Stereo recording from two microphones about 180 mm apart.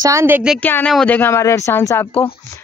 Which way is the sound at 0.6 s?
10° left (ahead or behind).